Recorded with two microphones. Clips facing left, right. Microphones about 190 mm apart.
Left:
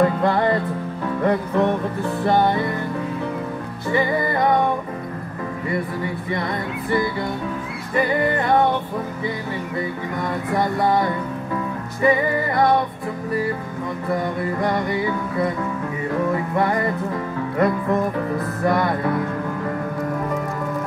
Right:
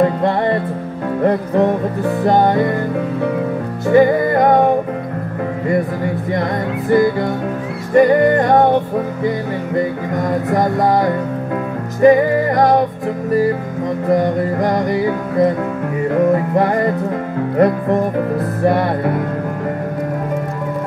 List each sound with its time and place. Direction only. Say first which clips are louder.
0.0 s music: right 3 dB; 25° right (ahead or behind); by 2.8 s 55° right (ahead or behind)
3.9 s music: right 9 dB; 50° right (ahead or behind)
5.7 s music: right 7 dB; 50° right (ahead or behind)
10.1 s music: right 6 dB; 45° right (ahead or behind)
14.0 s music: right 8 dB; 40° right (ahead or behind)
16.5 s music: right 5 dB; 40° right (ahead or behind)